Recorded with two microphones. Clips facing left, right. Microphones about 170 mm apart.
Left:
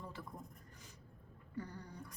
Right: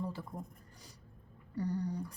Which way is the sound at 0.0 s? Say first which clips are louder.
Right 9 dB; 35° right (ahead or behind).